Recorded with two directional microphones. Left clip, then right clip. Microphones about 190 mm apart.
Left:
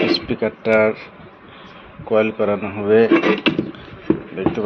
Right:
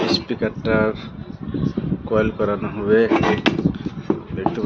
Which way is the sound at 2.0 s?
10° right (ahead or behind).